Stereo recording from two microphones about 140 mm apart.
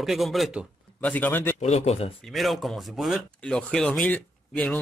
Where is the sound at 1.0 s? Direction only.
10° left (ahead or behind).